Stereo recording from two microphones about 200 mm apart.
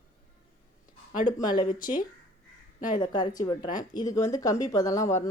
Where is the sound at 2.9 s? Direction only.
20° left (ahead or behind).